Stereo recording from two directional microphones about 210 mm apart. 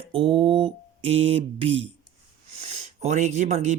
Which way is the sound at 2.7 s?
30° right (ahead or behind).